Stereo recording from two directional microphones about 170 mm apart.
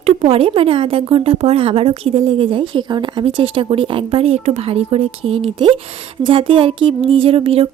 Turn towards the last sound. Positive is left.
turn(degrees=-35)  # may be behind; listen again after turning